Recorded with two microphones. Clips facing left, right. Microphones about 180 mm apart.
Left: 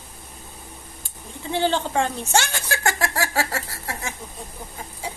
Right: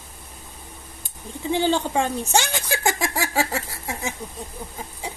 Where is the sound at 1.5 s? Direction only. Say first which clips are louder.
Right 1 dB; 15° right (ahead or behind).